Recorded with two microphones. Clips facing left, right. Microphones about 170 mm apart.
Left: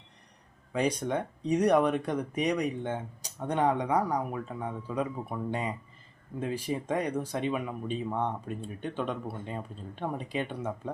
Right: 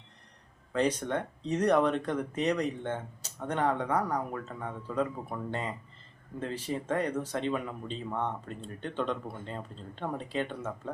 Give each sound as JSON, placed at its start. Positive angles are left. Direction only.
{"t": 0.7, "sound": "speech", "side_deg": 10}